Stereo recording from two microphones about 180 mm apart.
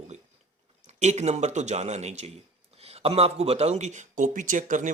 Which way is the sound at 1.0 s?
40° right (ahead or behind).